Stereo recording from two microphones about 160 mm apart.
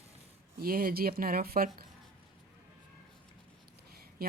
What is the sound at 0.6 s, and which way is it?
Speech, 65° right (ahead or behind).